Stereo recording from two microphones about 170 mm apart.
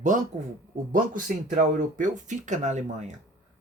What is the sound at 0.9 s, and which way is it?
Speech, 50° right (ahead or behind).